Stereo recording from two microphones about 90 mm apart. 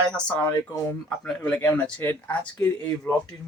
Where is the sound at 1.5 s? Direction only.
20° left (ahead or behind).